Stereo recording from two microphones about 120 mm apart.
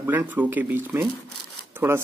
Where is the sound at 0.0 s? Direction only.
15° right (ahead or behind).